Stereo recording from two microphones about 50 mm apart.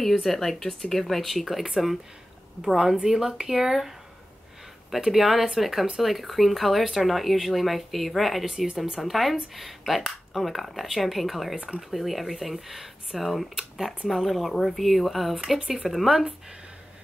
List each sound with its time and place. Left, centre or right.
0.1 s speech: centre
4.9 s speech: centre
8.5 s speech: centre
9.0 s speech: centre
11.5 s speech: right
11.9 s speech: centre
15.3 s speech: centre